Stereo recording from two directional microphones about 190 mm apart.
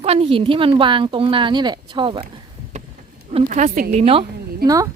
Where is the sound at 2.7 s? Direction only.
35° right (ahead or behind).